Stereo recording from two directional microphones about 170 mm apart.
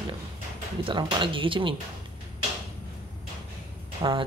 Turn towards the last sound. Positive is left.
turn(degrees=-25)  # may be behind; listen again after turning